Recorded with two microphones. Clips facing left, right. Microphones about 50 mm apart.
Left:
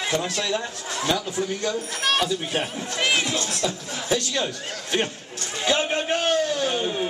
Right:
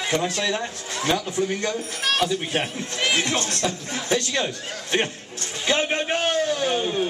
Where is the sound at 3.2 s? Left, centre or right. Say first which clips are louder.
Right 1 dB; right.